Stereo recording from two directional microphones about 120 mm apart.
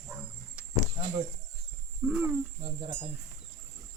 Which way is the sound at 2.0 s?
10° right (ahead or behind).